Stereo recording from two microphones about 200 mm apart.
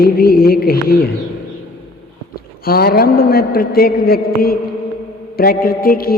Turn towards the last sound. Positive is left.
turn(degrees=50)  # may be behind; listen again after turning